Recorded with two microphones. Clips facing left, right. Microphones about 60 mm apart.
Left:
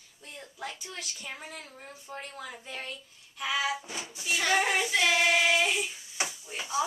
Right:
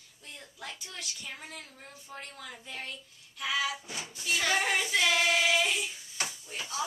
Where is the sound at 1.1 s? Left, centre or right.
Centre.